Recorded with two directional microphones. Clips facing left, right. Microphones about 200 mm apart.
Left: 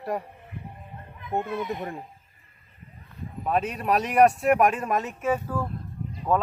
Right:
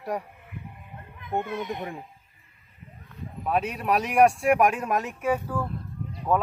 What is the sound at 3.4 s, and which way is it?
Speech, 5° right (ahead or behind).